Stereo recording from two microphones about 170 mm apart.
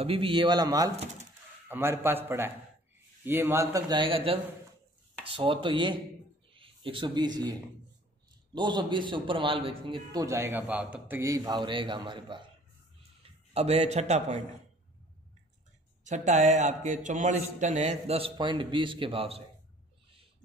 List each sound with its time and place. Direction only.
0.0 s a man's voice: 30° right (ahead or behind)
8.5 s a man's voice: 25° right (ahead or behind)
10.2 s a man's voice: 15° right (ahead or behind)
13.2 s speech: 35° right (ahead or behind)
16.0 s a man's voice: 45° right (ahead or behind)